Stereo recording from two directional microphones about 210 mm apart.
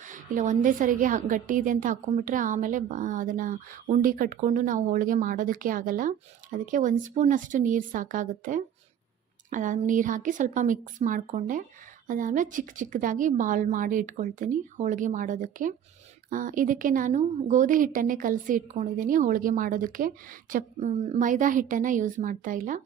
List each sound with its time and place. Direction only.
0.0 s a woman's voice: 35° right (ahead or behind)